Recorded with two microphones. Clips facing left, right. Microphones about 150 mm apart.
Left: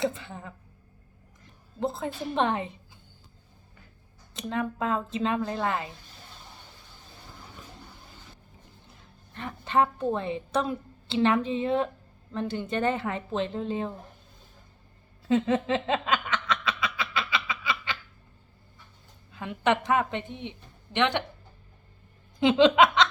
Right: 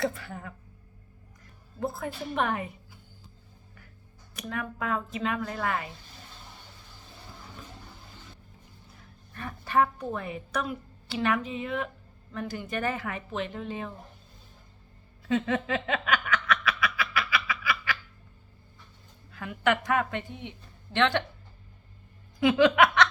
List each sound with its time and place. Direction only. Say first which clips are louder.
0.0 s a woman's voice: left 1 dB; 20° left (ahead or behind)
1.8 s a woman's voice: left 2 dB; 20° left (ahead or behind)
4.4 s a woman's voice: left 5 dB; 25° left (ahead or behind)
9.3 s a woman's voice: left 1 dB; 20° left (ahead or behind)
15.3 s a sound: left 3 dB; 30° left (ahead or behind)
19.3 s a woman's voice: left 1 dB; 20° left (ahead or behind)
22.4 s speech: left 2 dB; 25° left (ahead or behind)